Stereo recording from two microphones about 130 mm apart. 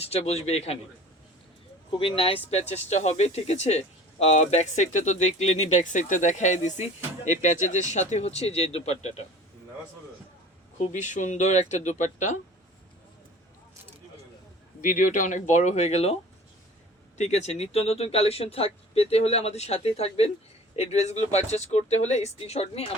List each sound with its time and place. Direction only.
0.1 s speech: 55° left (ahead or behind)
2.0 s speech: 45° left (ahead or behind); by 7.9 s 70° left (ahead or behind)
8.1 s speech: 55° left (ahead or behind)
10.8 s speech: 70° left (ahead or behind)
14.8 s speech: 90° left; by 16.1 s 55° left (ahead or behind)
17.2 s speech: 60° left (ahead or behind)